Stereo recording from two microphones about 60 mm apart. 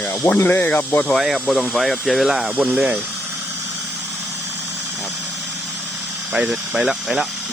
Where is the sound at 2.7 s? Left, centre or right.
Centre.